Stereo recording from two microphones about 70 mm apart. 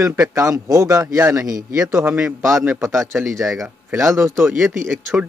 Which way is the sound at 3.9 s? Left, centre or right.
Right.